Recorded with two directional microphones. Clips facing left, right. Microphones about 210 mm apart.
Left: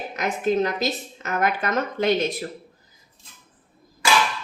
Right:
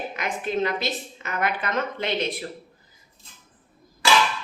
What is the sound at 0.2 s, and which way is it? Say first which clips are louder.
A woman's voice: left 5 dB; 40° left (ahead or behind).